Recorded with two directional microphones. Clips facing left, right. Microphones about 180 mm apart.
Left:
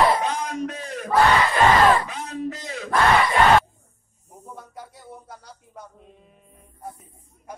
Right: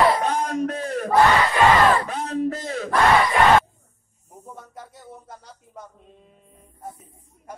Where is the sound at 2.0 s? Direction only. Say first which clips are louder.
Right 5 dB; 50° right (ahead or behind).